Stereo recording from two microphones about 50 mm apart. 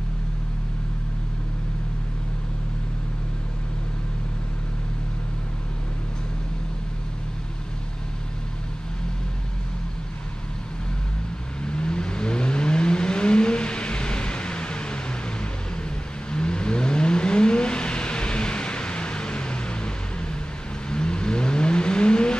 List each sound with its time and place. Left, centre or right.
11.6 s vehicle: centre
16.3 s vehicle: centre